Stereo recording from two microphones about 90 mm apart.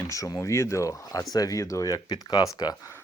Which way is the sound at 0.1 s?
35° left (ahead or behind).